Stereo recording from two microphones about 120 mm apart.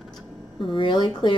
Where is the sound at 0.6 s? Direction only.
45° left (ahead or behind).